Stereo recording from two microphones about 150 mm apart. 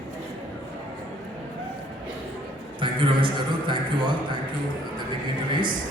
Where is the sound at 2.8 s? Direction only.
35° right (ahead or behind).